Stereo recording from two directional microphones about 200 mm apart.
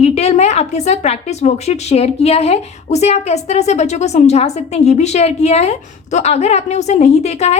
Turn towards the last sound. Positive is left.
turn(degrees=35)  # may be behind; listen again after turning